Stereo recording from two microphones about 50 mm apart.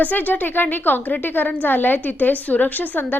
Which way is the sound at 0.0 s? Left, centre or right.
Left.